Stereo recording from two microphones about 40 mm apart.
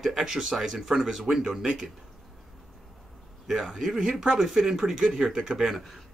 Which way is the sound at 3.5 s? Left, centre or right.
Centre.